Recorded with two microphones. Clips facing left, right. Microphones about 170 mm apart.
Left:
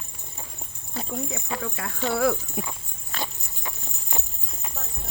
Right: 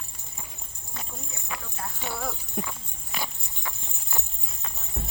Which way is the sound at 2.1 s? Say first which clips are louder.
Left 11 dB; 80° left.